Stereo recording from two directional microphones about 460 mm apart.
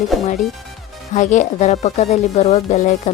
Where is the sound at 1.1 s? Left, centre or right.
Centre.